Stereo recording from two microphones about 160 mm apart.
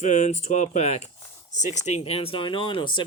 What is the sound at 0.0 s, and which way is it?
Speech, 50° left (ahead or behind).